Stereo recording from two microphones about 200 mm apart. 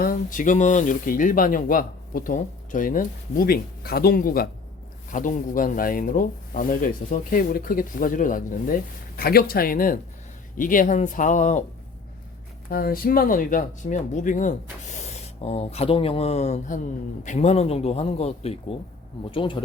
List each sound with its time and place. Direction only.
0.0 s speech: 45° left (ahead or behind)
12.7 s speech: 45° left (ahead or behind); by 19.6 s 25° left (ahead or behind)